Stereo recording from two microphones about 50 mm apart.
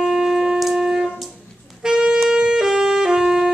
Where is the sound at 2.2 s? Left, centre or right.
Centre.